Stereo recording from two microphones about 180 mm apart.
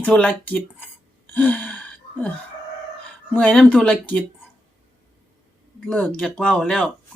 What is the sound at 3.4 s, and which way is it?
Speech, 5° left (ahead or behind).